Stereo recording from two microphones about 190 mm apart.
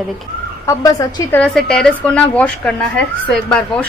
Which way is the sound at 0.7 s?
15° left (ahead or behind).